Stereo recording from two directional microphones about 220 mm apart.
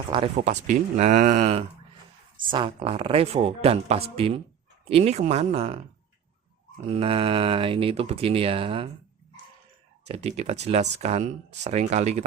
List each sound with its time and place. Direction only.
0.1 s speech: 25° right (ahead or behind)
6.8 s speech: 25° right (ahead or behind)
10.1 s speech: 30° right (ahead or behind)